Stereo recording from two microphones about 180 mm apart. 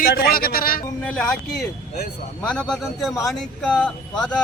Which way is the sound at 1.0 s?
5° left (ahead or behind).